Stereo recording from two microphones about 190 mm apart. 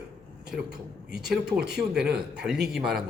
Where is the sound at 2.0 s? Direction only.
55° right (ahead or behind).